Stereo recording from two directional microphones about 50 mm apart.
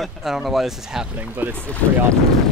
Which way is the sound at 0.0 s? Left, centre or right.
Centre.